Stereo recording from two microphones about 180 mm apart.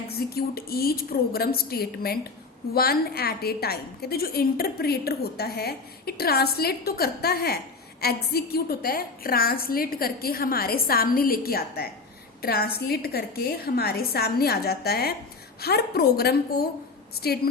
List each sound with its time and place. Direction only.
0.1 s a woman's voice: 60° left (ahead or behind)